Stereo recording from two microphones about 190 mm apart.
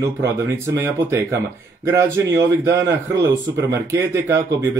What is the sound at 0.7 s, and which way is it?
Speech, 15° right (ahead or behind).